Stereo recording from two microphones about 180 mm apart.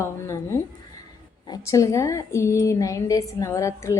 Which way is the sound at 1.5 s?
20° left (ahead or behind).